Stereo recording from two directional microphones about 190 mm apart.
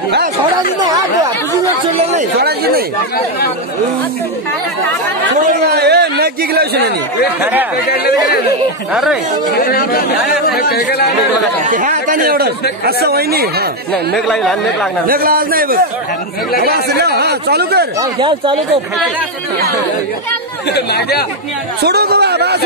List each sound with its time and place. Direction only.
2.3 s speech: 55° right (ahead or behind)
5.4 s speech: 55° right (ahead or behind)
8.9 s speech: 5° right (ahead or behind)
9.6 s speech: 50° left (ahead or behind)
11.6 s speech: 40° right (ahead or behind)
14.1 s speech: centre (ahead or behind)
15.0 s speech: 50° right (ahead or behind)
18.2 s speech: 25° right (ahead or behind)
20.7 s speech: 60° left (ahead or behind)
21.8 s a sound: 55° right (ahead or behind)